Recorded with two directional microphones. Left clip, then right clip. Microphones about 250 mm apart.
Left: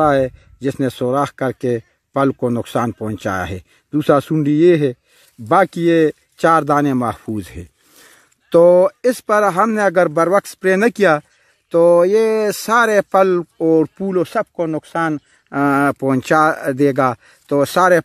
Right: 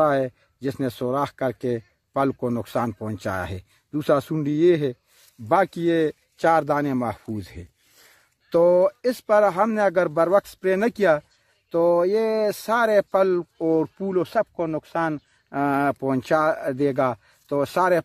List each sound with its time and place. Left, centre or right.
0.0 s speech: left